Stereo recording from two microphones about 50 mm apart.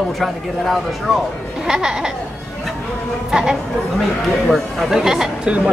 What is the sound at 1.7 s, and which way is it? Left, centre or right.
Speech, centre.